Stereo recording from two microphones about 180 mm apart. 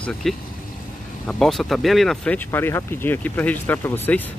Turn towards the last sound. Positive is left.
turn(degrees=10)  # may be behind; listen again after turning